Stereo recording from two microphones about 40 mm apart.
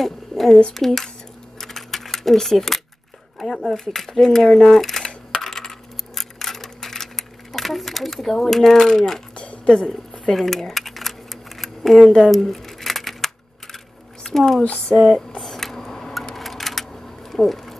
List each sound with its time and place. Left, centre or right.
0.0 s speech: centre
1.6 s coin: centre
3.3 s speech: centre
3.8 s coin: centre
9.4 s a sound: left
10.3 s typing: centre
12.2 s a sound: centre
14.2 s speech: centre
15.1 s camera: centre
16.3 s sewing machine: centre